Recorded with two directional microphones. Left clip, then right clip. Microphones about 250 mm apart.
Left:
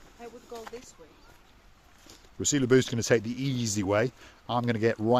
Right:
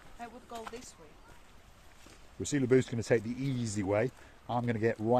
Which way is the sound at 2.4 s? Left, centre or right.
Left.